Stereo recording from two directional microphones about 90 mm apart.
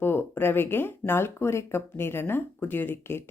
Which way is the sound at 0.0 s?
25° left (ahead or behind).